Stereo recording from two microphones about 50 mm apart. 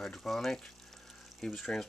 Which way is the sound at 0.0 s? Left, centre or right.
Centre.